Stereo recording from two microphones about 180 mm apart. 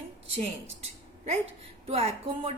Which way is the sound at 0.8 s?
35° right (ahead or behind).